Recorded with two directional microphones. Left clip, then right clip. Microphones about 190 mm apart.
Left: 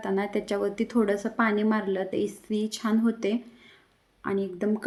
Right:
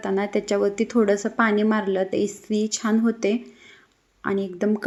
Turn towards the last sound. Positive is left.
turn(degrees=-10)  # may be behind; listen again after turning